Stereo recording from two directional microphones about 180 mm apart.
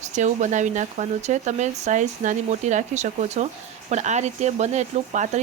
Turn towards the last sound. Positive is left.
turn(degrees=-40)  # may be behind; listen again after turning